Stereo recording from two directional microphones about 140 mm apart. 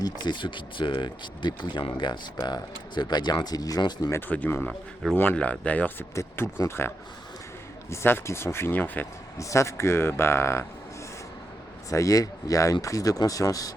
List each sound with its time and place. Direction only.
0.0 s speech: 30° left (ahead or behind)
4.1 s speech: 15° left (ahead or behind)
11.9 s speech: 25° left (ahead or behind)